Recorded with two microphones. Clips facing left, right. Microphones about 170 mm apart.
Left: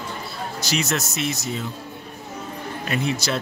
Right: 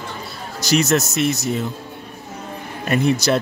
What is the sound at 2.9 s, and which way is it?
Speech, 45° right (ahead or behind).